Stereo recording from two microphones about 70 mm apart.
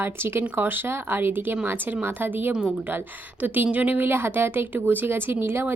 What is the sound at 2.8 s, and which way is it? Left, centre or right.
A woman's voice, right.